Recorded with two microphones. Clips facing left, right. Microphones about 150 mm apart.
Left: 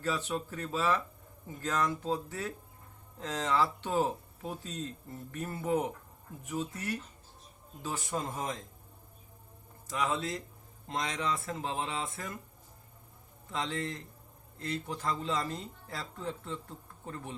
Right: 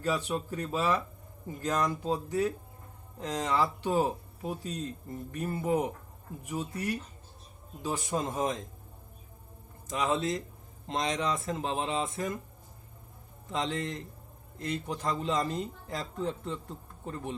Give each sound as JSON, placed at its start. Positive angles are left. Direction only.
{"t": 0.0, "sound": "speech", "side_deg": -15}
{"t": 9.8, "sound": "speech", "side_deg": -20}
{"t": 13.5, "sound": "speech", "side_deg": -20}